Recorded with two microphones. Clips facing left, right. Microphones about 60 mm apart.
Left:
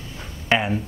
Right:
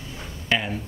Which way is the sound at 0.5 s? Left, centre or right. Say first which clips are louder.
Left 4 dB; left.